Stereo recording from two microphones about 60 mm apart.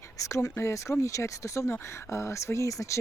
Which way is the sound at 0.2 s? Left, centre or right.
Left.